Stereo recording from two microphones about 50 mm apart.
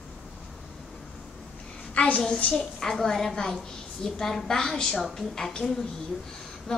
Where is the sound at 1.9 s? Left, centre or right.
Left.